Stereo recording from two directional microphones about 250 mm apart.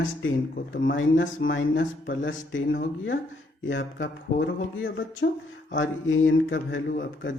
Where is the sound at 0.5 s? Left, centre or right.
Left.